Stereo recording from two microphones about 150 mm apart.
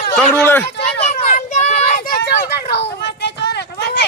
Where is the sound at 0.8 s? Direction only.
55° left (ahead or behind); by 3.9 s 90° left.